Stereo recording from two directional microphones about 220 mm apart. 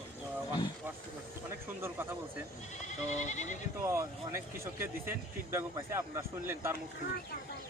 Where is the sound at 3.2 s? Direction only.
35° left (ahead or behind).